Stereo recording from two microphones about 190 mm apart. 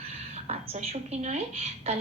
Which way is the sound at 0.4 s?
35° right (ahead or behind).